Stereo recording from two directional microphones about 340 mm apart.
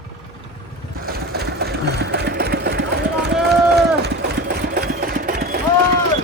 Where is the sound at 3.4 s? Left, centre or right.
Right.